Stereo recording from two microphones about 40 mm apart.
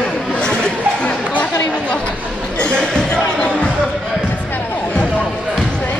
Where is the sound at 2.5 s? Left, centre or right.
Left.